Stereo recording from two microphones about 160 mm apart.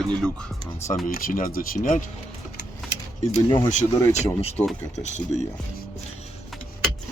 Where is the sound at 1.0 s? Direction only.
60° left (ahead or behind).